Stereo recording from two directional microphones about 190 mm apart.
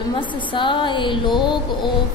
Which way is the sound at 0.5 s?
25° left (ahead or behind).